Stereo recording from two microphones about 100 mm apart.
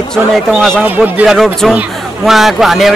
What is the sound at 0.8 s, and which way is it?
Speech, 15° right (ahead or behind).